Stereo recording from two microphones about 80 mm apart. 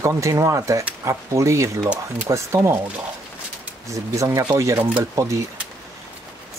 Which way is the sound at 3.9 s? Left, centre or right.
Right.